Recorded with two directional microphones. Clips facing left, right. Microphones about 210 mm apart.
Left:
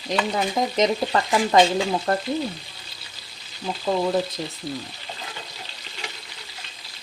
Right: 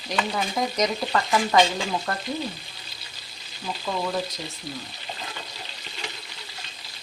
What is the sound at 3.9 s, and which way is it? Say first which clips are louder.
Frying: left 6 dB; 30° left (ahead or behind).